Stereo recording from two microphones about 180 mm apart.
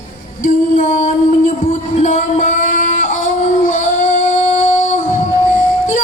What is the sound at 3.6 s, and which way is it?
Child singing, 45° left (ahead or behind).